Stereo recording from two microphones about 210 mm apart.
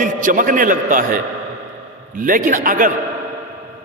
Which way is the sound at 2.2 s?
40° right (ahead or behind).